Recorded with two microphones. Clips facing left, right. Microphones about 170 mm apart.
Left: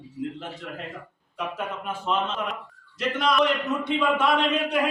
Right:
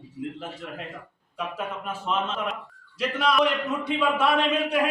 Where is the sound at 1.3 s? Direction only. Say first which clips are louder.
Left 1 dB; 5° right (ahead or behind).